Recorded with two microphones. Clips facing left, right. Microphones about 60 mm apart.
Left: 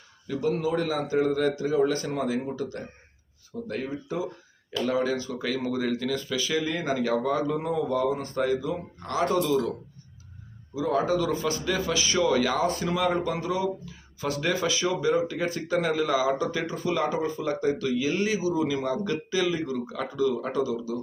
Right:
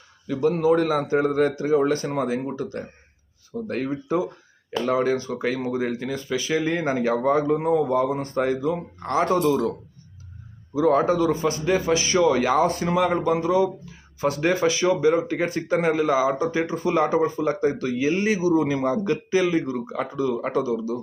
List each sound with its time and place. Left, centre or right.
0.3 s speech: right
3.7 s speech: right
5.7 s speech: right
8.2 s speech: right
10.8 s speech: right
14.4 s speech: right
16.8 s speech: right